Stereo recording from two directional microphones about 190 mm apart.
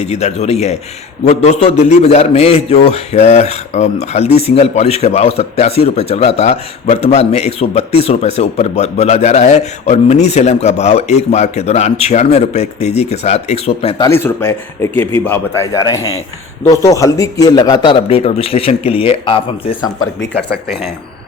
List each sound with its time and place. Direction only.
0.0 s a man's voice: 35° left (ahead or behind)
14.0 s a man's voice: 10° left (ahead or behind); by 19.4 s 30° left (ahead or behind)